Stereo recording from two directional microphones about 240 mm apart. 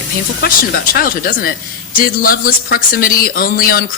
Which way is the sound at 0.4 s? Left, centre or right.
Left.